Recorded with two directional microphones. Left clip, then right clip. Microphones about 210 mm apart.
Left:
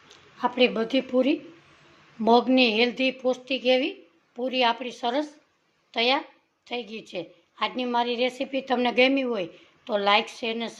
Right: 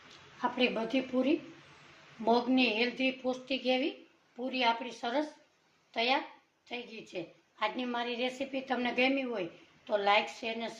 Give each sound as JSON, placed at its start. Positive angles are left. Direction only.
{"t": 0.3, "sound": "a woman's voice", "side_deg": 40}